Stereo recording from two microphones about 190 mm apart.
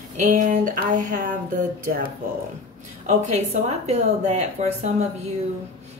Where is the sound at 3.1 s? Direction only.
35° right (ahead or behind).